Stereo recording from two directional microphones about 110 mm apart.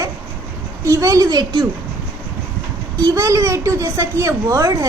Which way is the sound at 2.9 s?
30° right (ahead or behind).